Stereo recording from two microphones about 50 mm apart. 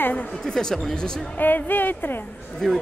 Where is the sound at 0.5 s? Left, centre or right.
Centre.